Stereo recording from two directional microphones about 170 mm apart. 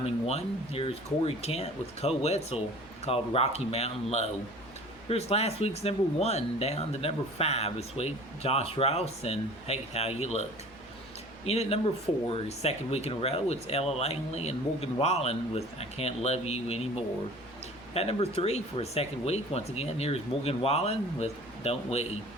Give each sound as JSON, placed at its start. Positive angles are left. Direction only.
{"t": 0.0, "sound": "speech", "side_deg": 40}
{"t": 11.4, "sound": "speech", "side_deg": 40}